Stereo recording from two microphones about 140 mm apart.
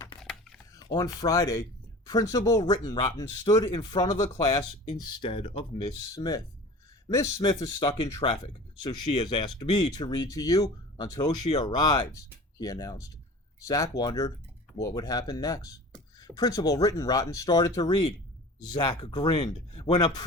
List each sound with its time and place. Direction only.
0.2 s typing: 5° left (ahead or behind)
0.7 s speech: 25° left (ahead or behind)
6.1 s speech: 25° left (ahead or behind)